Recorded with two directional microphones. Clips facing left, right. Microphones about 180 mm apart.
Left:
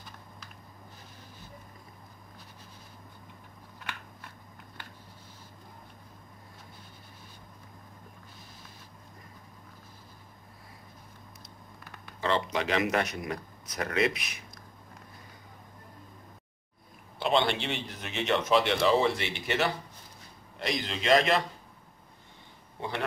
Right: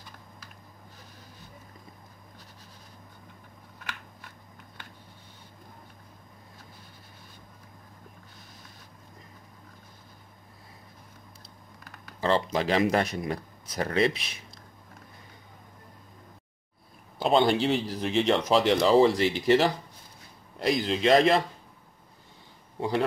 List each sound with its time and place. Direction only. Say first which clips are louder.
12.2 s speech: right 3 dB; 35° right (ahead or behind)
17.2 s speech: right 5 dB; 40° right (ahead or behind)
20.8 s speech: right 3 dB; 30° right (ahead or behind)
22.8 s a man's voice: right 8 dB; 35° right (ahead or behind)